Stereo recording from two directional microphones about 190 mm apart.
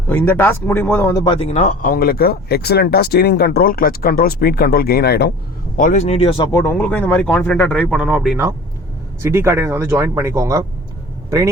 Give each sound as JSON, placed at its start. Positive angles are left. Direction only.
{"t": 0.1, "sound": "speech", "side_deg": 10}
{"t": 1.4, "sound": "speech", "side_deg": 35}
{"t": 5.7, "sound": "speech", "side_deg": 40}
{"t": 6.6, "sound": "speech", "side_deg": 10}
{"t": 9.2, "sound": "speech", "side_deg": -15}